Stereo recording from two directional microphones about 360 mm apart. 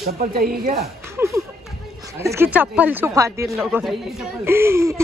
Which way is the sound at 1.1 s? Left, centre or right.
Centre.